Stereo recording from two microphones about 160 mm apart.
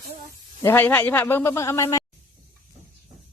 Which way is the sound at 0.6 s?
15° left (ahead or behind).